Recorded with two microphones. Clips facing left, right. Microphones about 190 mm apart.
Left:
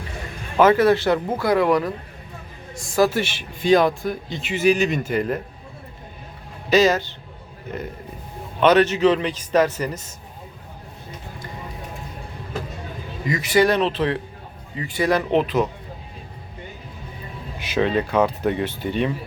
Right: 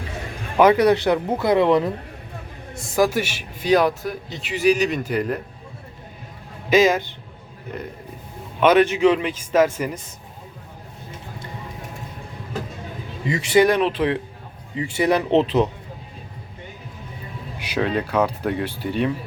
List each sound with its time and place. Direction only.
0.5 s speech: 15° right (ahead or behind)
2.9 s speech: 10° right (ahead or behind)
6.7 s speech: 15° right (ahead or behind)
8.6 s speech: 10° right (ahead or behind)
13.2 s speech: 30° right (ahead or behind)
17.7 s speech: 5° right (ahead or behind)